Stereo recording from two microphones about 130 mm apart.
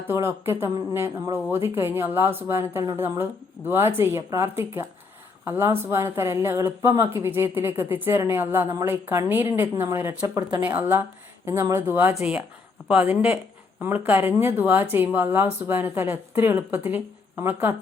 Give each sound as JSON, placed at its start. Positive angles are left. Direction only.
{"t": 0.1, "sound": "speech", "side_deg": -20}
{"t": 10.6, "sound": "speech", "side_deg": -15}